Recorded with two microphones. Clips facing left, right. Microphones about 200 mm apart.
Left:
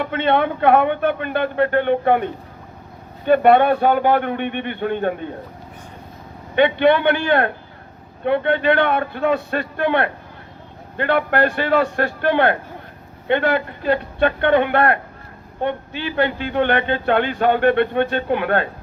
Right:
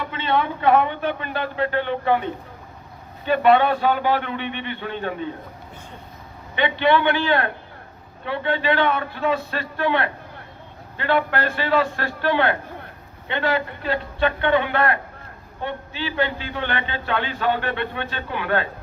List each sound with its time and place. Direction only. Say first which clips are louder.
0.0 s a man's voice: left 5 dB; 60° left (ahead or behind)
6.6 s a man's voice: left 5 dB; 55° left (ahead or behind)